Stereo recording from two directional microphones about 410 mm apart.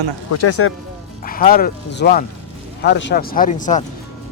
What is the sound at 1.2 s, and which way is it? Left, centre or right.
Speech, centre.